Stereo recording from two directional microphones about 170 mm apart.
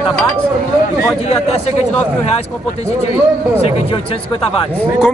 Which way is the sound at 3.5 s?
35° left (ahead or behind).